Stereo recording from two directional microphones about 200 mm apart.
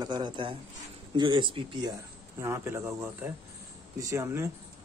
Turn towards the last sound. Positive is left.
turn(degrees=-15)  # may be behind; listen again after turning